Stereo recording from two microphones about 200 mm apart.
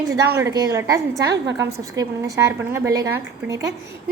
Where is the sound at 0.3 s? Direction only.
15° right (ahead or behind).